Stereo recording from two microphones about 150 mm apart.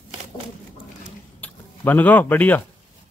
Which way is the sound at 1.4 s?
10° left (ahead or behind).